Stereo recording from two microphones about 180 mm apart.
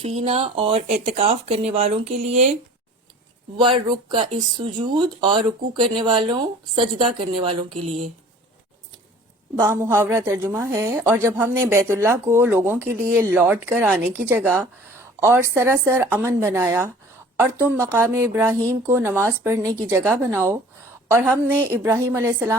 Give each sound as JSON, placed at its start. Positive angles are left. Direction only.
{"t": 0.0, "sound": "speech", "side_deg": -30}
{"t": 3.6, "sound": "speech", "side_deg": -25}
{"t": 9.6, "sound": "a woman's voice", "side_deg": -15}